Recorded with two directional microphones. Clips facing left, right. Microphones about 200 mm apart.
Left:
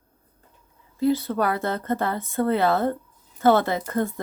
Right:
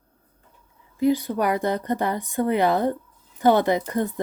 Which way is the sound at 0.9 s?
15° right (ahead or behind).